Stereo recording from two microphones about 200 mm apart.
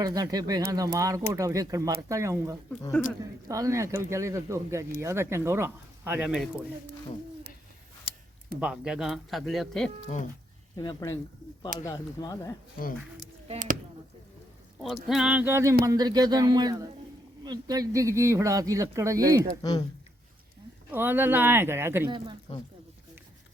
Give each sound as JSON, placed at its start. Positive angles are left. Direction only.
{"t": 0.0, "sound": "speech", "side_deg": -20}
{"t": 8.6, "sound": "speech", "side_deg": -5}
{"t": 10.8, "sound": "speech", "side_deg": 20}
{"t": 13.5, "sound": "speech", "side_deg": -40}
{"t": 15.0, "sound": "speech", "side_deg": 0}
{"t": 20.9, "sound": "speech", "side_deg": -10}